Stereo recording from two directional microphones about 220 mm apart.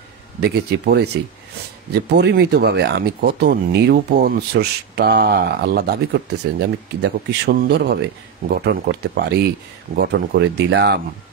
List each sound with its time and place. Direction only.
0.4 s speech: 45° right (ahead or behind)
2.0 s speech: 50° right (ahead or behind)